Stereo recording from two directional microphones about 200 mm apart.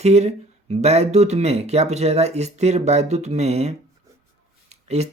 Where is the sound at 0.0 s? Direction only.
30° right (ahead or behind).